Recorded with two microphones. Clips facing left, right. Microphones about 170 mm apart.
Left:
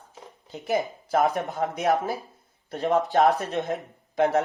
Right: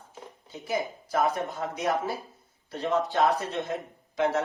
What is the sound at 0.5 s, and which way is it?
Speech, 60° left (ahead or behind).